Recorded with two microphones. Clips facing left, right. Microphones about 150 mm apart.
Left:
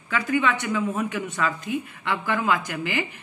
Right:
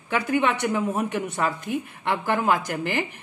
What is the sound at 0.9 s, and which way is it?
Speech, 15° right (ahead or behind).